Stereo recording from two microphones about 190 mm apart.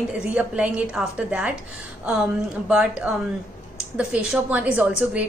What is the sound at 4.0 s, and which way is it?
A woman's voice, 5° right (ahead or behind).